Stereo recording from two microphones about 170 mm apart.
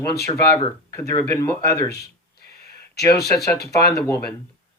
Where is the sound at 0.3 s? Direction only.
15° left (ahead or behind).